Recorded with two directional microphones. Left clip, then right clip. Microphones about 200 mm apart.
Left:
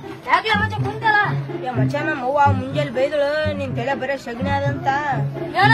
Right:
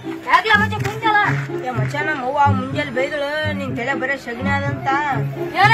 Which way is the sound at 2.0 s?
35° left (ahead or behind).